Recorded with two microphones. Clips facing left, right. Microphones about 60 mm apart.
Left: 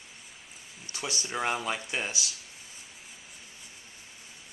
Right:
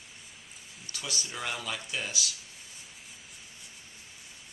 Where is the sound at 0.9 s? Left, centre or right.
Left.